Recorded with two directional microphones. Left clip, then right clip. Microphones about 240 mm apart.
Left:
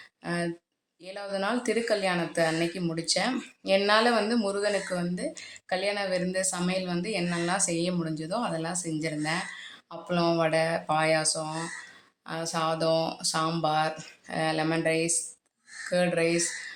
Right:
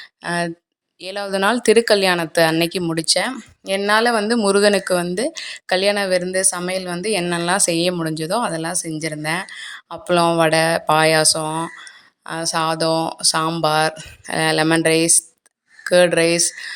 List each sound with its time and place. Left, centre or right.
0.2 s a woman's voice: right